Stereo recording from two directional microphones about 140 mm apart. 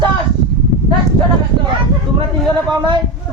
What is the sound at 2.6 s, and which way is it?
Speech, 30° right (ahead or behind).